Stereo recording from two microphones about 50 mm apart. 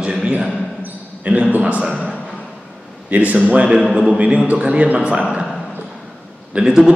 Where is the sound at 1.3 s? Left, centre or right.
Right.